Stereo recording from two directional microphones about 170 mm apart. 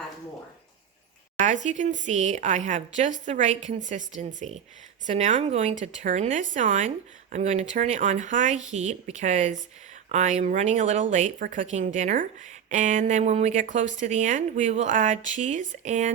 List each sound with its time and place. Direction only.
1.4 s speech: 45° right (ahead or behind)